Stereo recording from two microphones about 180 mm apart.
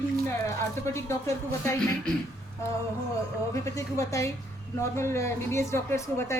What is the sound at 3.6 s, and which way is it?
A woman's voice, 15° left (ahead or behind).